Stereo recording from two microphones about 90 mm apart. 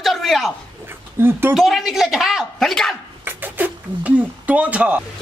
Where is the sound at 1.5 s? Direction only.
Centre (ahead or behind).